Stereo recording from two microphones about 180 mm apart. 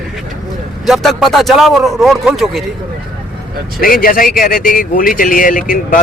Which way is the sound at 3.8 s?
50° left (ahead or behind).